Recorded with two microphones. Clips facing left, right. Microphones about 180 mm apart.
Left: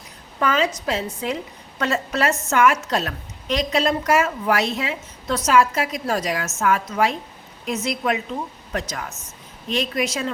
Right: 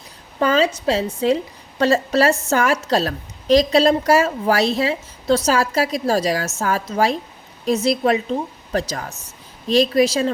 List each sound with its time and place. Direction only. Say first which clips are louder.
0.3 s a woman's voice: right 4 dB; 30° right (ahead or behind)